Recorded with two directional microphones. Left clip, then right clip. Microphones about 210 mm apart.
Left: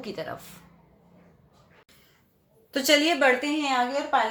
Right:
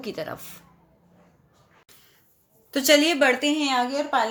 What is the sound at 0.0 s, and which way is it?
Speech, 30° right (ahead or behind).